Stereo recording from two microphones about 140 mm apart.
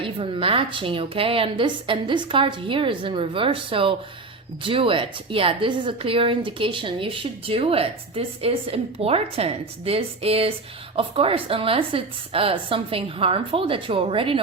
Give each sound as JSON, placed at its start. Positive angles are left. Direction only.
{"t": 0.0, "sound": "a woman's voice", "side_deg": -40}